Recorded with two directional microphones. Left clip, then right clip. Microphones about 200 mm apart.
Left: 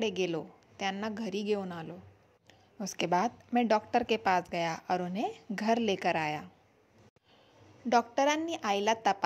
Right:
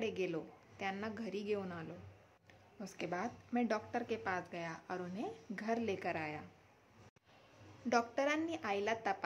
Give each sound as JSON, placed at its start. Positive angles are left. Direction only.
{"t": 0.0, "sound": "a woman's voice", "side_deg": 30}
{"t": 7.9, "sound": "a woman's voice", "side_deg": 30}